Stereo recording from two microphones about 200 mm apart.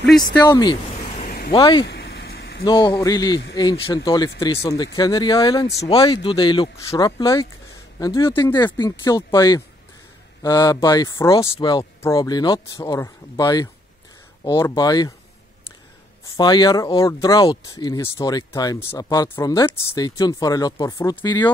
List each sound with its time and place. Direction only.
0.5 s speech: 20° left (ahead or behind)
1.1 s vehicle: 45° left (ahead or behind)
1.5 s speech: 25° left (ahead or behind)
1.9 s vehicle: 55° left (ahead or behind)
2.6 s speech: 20° left (ahead or behind)
16.3 s speech: 20° left (ahead or behind)